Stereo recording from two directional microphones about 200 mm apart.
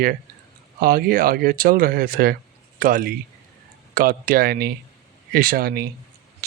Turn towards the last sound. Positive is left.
turn(degrees=-50)  # may be behind; listen again after turning